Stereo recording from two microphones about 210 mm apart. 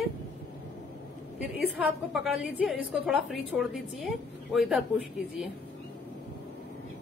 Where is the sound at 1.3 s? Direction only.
5° right (ahead or behind).